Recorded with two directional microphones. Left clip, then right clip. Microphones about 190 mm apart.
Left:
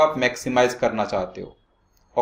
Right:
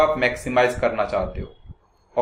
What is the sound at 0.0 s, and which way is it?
Speech, 45° left (ahead or behind).